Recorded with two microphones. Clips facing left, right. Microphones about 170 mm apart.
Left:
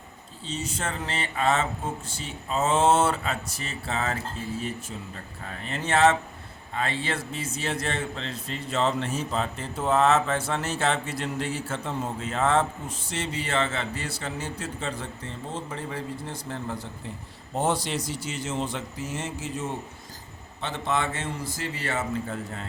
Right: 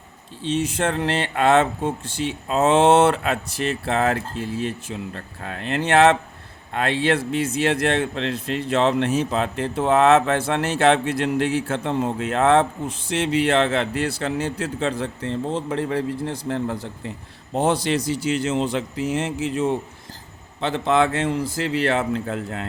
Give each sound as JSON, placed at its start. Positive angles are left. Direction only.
{"t": 0.8, "sound": "a man's voice", "side_deg": -65}
{"t": 17.5, "sound": "a man's voice", "side_deg": -85}